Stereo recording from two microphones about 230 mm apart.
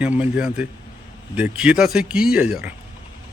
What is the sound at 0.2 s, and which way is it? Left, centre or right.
Speech, centre.